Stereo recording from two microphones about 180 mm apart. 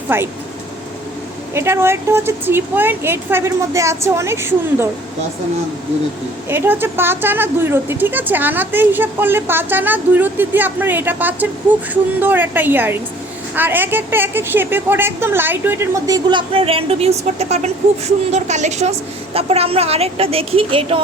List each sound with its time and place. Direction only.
0.1 s a woman's voice: 10° right (ahead or behind)
1.5 s a woman's voice: 15° right (ahead or behind)
6.5 s a woman's voice: 10° right (ahead or behind)
16.5 s a woman's voice: 30° right (ahead or behind)